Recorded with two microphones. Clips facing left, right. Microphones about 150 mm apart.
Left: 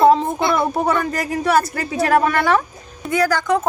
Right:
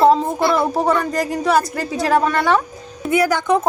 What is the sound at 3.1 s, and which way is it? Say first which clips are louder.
Speech: right 1 dB; 15° right (ahead or behind).